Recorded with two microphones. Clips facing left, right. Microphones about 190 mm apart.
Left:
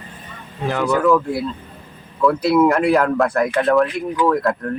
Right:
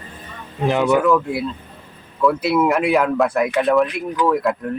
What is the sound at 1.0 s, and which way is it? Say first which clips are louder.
Speech: left 1 dB; centre (ahead or behind).